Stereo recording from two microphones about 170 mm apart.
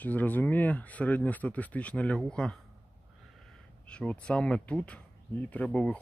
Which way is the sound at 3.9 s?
5° left (ahead or behind).